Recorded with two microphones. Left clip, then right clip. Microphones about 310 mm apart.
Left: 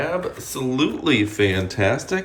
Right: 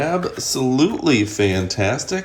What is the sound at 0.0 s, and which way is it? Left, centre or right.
Speech, centre.